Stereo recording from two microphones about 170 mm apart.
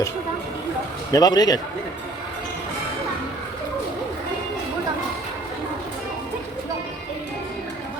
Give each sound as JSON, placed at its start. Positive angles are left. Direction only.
{"t": 1.1, "sound": "a man's voice", "side_deg": 20}